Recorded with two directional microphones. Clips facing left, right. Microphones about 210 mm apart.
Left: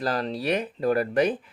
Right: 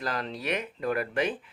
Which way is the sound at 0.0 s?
35° left (ahead or behind).